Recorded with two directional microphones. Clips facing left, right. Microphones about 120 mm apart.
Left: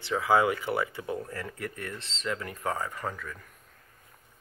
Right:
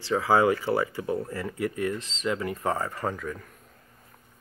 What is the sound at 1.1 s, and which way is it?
Speech, 10° right (ahead or behind).